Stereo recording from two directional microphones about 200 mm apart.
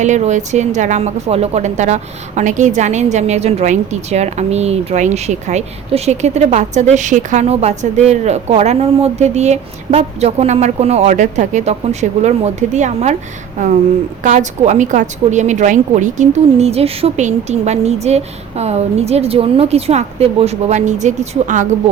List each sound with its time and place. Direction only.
0.0 s a woman's voice: 35° right (ahead or behind)